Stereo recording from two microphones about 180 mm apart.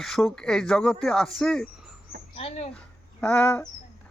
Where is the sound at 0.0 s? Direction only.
Centre (ahead or behind).